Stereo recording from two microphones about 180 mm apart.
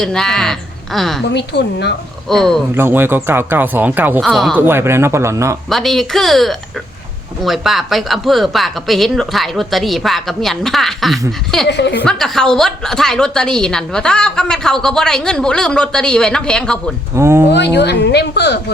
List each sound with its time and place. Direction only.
0.0 s a woman's voice: 5° left (ahead or behind)
1.3 s a woman's voice: 70° left (ahead or behind)
2.3 s a woman's voice: centre (ahead or behind)
2.7 s speech: 10° right (ahead or behind)
4.2 s a woman's voice: centre (ahead or behind)
4.5 s speech: 10° right (ahead or behind)
5.6 s a woman's voice: centre (ahead or behind)
11.7 s a woman's voice: 70° left (ahead or behind)
12.0 s a woman's voice: 5° left (ahead or behind)
17.2 s speech: 15° right (ahead or behind)
17.7 s a woman's voice: 70° left (ahead or behind)